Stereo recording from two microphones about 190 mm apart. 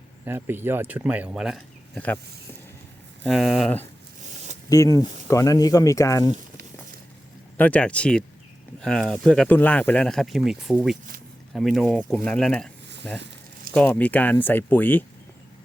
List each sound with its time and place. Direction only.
0.3 s speech: 10° right (ahead or behind)
3.2 s speech: centre (ahead or behind)
4.7 s speech: 20° left (ahead or behind)
7.5 s speech: 10° left (ahead or behind)
13.7 s speech: 10° left (ahead or behind)